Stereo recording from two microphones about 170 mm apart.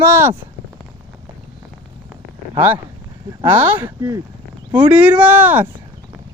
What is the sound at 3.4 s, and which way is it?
Speech, 10° right (ahead or behind).